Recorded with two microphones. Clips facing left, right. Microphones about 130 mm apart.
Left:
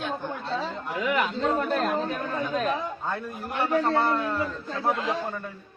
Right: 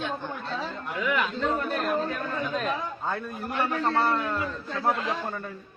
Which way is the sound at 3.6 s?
20° left (ahead or behind).